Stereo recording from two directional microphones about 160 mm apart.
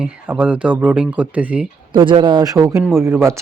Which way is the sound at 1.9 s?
30° right (ahead or behind).